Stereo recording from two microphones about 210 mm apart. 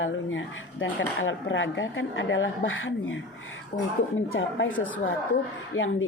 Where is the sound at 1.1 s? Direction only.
65° left (ahead or behind).